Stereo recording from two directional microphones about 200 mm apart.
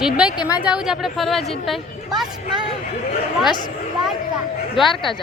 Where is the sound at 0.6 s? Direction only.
5° right (ahead or behind).